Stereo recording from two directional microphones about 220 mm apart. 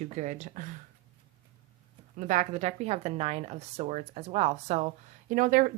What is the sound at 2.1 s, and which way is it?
A woman's voice, 35° right (ahead or behind).